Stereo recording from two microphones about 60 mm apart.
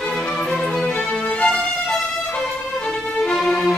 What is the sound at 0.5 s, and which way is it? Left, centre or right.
Music, centre.